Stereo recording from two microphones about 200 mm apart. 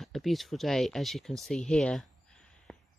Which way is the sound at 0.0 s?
Centre (ahead or behind).